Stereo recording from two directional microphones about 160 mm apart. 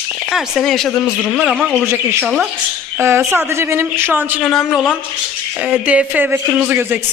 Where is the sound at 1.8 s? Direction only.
15° right (ahead or behind).